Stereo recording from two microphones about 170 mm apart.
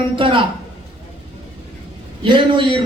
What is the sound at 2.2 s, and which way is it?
Speech, 30° right (ahead or behind).